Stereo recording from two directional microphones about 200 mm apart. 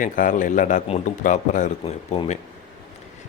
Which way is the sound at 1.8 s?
25° left (ahead or behind).